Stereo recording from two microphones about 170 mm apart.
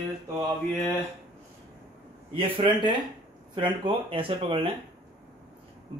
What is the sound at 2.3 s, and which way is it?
Speech, 30° right (ahead or behind).